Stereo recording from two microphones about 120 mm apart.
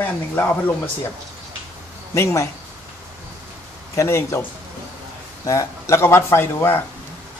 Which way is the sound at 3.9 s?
25° left (ahead or behind).